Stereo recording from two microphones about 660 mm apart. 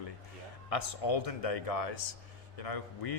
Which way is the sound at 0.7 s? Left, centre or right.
Left.